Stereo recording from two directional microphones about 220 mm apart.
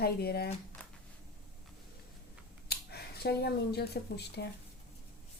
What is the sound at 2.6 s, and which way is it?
Speech, 45° left (ahead or behind).